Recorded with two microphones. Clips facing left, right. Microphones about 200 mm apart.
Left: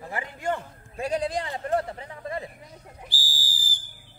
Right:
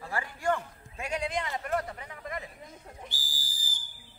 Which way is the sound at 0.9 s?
35° left (ahead or behind).